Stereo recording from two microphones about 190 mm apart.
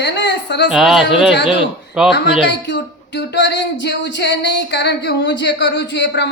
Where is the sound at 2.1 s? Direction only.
65° left (ahead or behind).